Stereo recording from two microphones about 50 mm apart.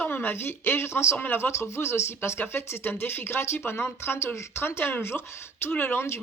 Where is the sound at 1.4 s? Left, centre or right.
Left.